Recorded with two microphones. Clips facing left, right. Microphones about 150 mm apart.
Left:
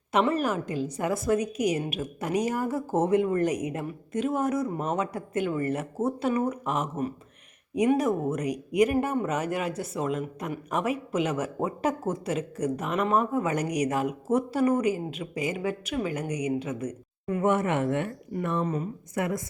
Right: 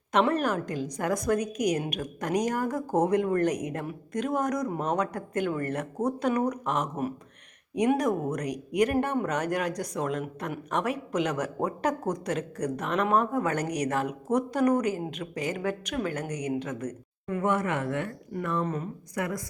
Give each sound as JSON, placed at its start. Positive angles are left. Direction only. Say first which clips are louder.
{"t": 0.1, "sound": "speech", "louder": "even", "side_deg": 5}
{"t": 7.9, "sound": "a woman's voice", "louder": "left 1 dB", "side_deg": 5}
{"t": 17.2, "sound": "speech", "louder": "left 2 dB", "side_deg": 20}
{"t": 18.6, "sound": "speech", "louder": "left 2 dB", "side_deg": 10}
{"t": 19.1, "sound": "speech", "louder": "left 3 dB", "side_deg": 25}